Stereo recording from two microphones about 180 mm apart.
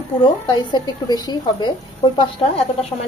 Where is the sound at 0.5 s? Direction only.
25° left (ahead or behind).